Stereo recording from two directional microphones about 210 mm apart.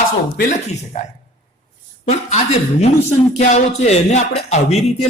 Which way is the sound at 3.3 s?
30° left (ahead or behind).